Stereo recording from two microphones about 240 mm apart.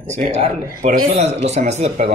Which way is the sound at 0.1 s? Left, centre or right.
Right.